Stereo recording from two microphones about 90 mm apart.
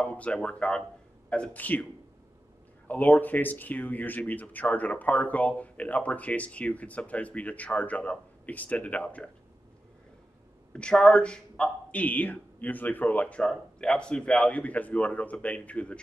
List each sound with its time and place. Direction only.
0.0 s speech: 15° left (ahead or behind)
2.9 s speech: 20° left (ahead or behind)
10.7 s speech: 10° left (ahead or behind)